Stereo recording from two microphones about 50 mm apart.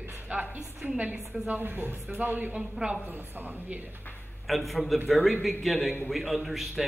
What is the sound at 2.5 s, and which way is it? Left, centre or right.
Speech, centre.